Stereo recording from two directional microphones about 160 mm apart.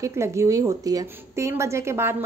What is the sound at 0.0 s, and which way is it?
A woman's voice, 20° right (ahead or behind).